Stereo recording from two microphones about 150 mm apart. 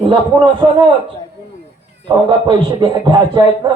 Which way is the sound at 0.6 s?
35° right (ahead or behind).